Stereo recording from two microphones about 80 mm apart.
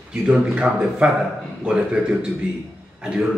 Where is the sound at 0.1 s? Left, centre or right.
Centre.